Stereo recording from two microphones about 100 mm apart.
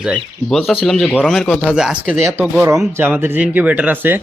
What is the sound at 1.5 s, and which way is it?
Speech, 15° left (ahead or behind).